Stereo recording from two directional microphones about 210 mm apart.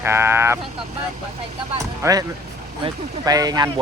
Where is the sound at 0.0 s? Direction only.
10° right (ahead or behind).